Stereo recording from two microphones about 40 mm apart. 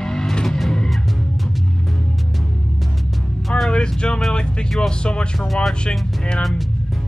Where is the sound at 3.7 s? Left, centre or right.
Left.